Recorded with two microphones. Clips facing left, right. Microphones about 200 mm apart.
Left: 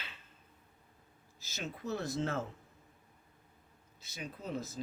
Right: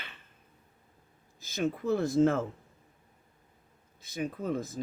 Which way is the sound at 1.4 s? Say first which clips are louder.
Right 11 dB; 50° right (ahead or behind).